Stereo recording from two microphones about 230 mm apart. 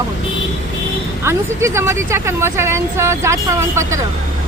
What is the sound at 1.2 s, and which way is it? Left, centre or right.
Speech, centre.